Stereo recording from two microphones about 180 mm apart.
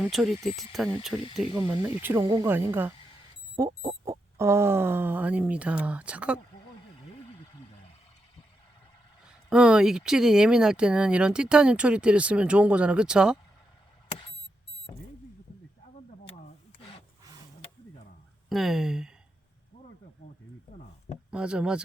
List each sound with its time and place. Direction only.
0.0 s speech: centre (ahead or behind)
1.5 s speech: 20° right (ahead or behind)
9.5 s speech: 5° right (ahead or behind)
18.4 s speech: centre (ahead or behind)
21.2 s speech: 5° right (ahead or behind)